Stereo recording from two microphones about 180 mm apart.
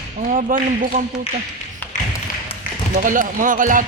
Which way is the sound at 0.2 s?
45° right (ahead or behind).